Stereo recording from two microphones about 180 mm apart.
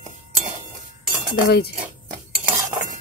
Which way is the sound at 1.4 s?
65° left (ahead or behind).